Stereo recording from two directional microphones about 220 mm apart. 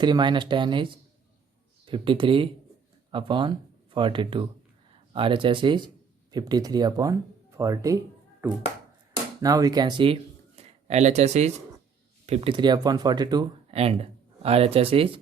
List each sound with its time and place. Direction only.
0.0 s speech: 20° right (ahead or behind)